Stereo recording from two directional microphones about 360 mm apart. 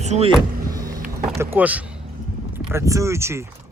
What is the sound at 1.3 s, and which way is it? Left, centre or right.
Speech, centre.